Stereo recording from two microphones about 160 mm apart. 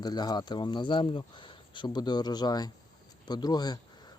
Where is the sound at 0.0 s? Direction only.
25° left (ahead or behind).